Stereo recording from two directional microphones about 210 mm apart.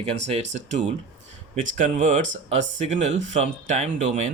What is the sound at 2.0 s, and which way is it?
Speech, 35° right (ahead or behind).